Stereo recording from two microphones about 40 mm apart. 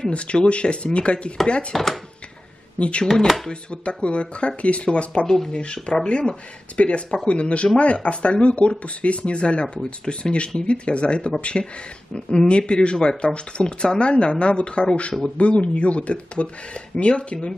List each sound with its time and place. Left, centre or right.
0.1 s speech: left
1.7 s speech: centre
2.8 s speech: left
11.6 s speech: centre
12.3 s speech: left